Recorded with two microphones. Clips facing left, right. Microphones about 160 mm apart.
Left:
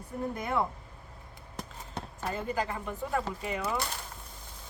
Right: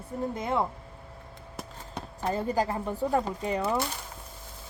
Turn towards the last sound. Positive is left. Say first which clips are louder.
# right 5 dB
turn(degrees=-35)  # may be behind; listen again after turning